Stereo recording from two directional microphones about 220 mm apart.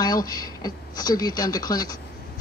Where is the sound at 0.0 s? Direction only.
15° left (ahead or behind).